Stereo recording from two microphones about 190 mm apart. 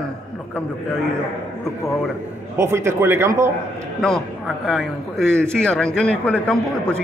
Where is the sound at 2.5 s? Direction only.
15° right (ahead or behind).